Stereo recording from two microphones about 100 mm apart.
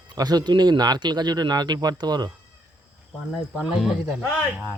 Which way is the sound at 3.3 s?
Centre (ahead or behind).